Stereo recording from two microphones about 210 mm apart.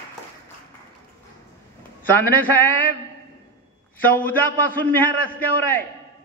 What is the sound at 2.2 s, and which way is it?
Speech, 10° left (ahead or behind).